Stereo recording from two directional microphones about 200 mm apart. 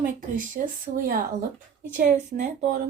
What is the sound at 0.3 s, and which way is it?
Speech, 40° right (ahead or behind).